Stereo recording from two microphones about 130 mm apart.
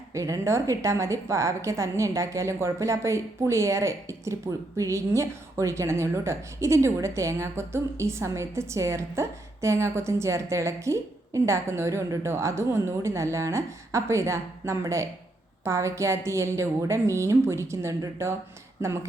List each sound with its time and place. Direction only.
0.1 s a woman's voice: 25° right (ahead or behind)